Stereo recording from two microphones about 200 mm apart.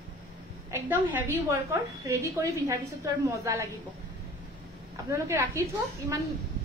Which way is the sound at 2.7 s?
15° right (ahead or behind).